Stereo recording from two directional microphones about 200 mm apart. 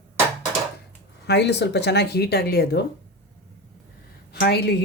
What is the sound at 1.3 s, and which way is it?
Speech, 55° left (ahead or behind).